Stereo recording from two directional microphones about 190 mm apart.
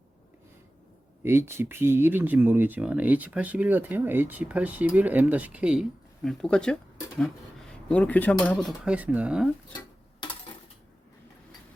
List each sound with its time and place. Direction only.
1.2 s speech: 10° right (ahead or behind)
10.2 s dishes: 25° left (ahead or behind)